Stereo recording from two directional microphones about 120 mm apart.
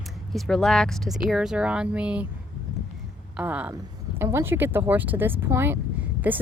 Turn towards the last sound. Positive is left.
turn(degrees=-15)  # may be behind; listen again after turning